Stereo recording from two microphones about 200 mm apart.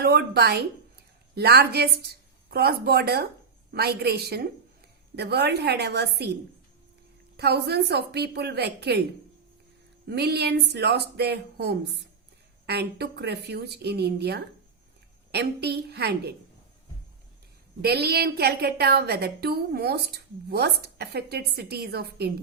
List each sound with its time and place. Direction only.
0.0 s a woman's voice: 55° right (ahead or behind)
7.3 s speech: 55° right (ahead or behind)
10.1 s speech: 55° right (ahead or behind)
17.8 s a woman's voice: 50° right (ahead or behind)